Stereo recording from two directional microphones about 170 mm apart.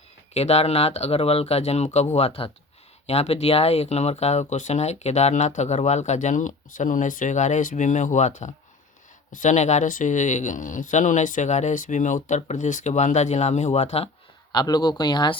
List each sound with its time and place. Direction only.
0.3 s speech: 40° left (ahead or behind)
14.5 s speech: 25° left (ahead or behind)